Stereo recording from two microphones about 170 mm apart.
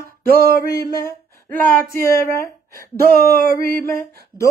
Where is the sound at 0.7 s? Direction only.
20° left (ahead or behind).